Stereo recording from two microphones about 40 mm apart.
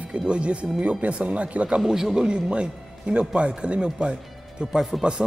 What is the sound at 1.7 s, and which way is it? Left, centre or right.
Speech, centre.